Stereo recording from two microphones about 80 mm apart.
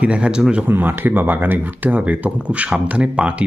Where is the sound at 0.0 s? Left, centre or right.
Centre.